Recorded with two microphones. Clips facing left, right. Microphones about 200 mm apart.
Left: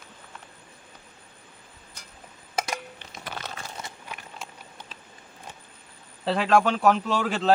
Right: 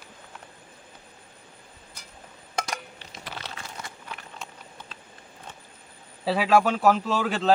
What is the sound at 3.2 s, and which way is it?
Crumpling, 50° left (ahead or behind).